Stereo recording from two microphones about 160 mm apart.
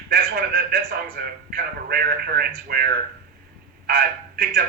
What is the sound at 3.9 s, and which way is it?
Speech, 75° right (ahead or behind).